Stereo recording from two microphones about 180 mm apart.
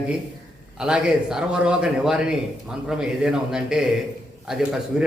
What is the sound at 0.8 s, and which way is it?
A man's voice, 5° right (ahead or behind).